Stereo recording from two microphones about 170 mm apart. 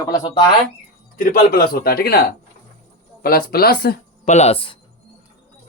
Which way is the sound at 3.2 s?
60° left (ahead or behind).